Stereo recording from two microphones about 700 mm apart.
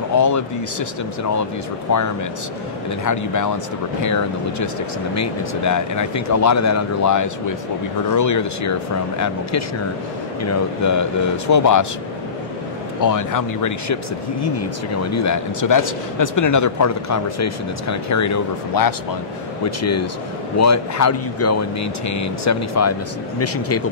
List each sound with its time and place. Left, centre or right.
0.1 s speech: left
1.9 s a man's voice: left
3.1 s a man's voice: left
13.0 s a man's voice: left
15.0 s a man's voice: left